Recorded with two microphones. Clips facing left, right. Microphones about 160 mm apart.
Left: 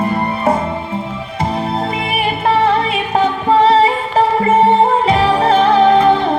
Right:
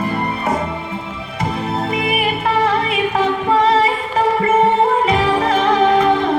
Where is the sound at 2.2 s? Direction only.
30° left (ahead or behind).